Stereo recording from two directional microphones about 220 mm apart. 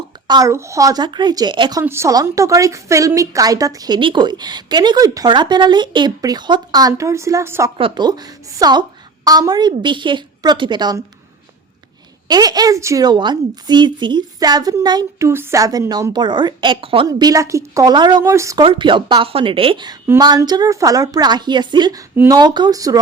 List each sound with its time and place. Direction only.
0.3 s a woman's voice: 15° right (ahead or behind)
12.3 s a woman's voice: 20° right (ahead or behind)